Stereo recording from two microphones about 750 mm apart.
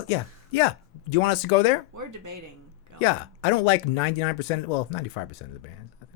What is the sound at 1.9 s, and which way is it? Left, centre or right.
Speech, right.